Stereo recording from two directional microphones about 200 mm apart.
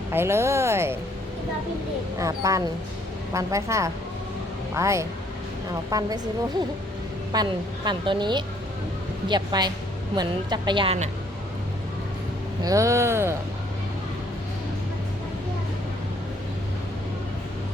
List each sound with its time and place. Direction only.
0.1 s speech: 10° right (ahead or behind)
2.1 s a woman's voice: 15° right (ahead or behind)
7.3 s a woman's voice: 20° right (ahead or behind)
12.6 s speech: 15° right (ahead or behind)